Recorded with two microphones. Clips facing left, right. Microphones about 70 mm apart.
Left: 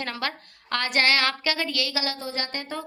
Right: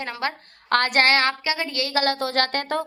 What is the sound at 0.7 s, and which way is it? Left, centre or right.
A woman's voice, right.